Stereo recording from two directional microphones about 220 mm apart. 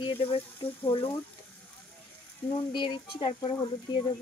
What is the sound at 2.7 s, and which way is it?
Speech, 20° left (ahead or behind).